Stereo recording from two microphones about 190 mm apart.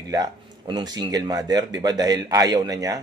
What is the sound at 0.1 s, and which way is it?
Speech, 20° right (ahead or behind).